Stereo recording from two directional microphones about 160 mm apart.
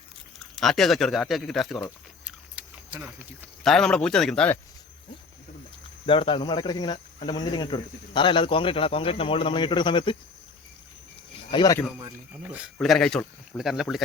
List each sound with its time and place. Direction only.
0.3 s speech: centre (ahead or behind)
2.2 s a sound: 10° right (ahead or behind)
3.6 s speech: 5° left (ahead or behind)
6.1 s speech: 30° left (ahead or behind)
11.5 s speech: 25° left (ahead or behind)
12.5 s speech: 5° right (ahead or behind)